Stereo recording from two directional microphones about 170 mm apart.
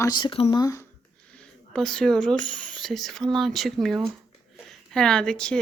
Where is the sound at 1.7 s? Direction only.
5° left (ahead or behind).